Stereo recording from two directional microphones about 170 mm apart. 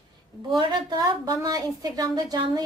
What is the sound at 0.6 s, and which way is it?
A woman's voice, 25° right (ahead or behind).